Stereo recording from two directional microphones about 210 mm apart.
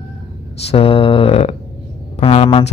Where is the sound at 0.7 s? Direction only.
25° left (ahead or behind).